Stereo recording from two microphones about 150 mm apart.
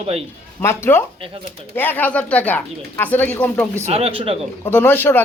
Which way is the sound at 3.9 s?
40° right (ahead or behind).